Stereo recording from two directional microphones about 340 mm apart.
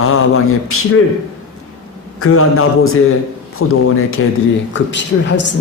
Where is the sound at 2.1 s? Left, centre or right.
Left.